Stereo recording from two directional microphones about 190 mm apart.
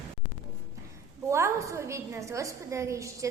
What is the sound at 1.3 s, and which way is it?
A woman's voice, 15° right (ahead or behind).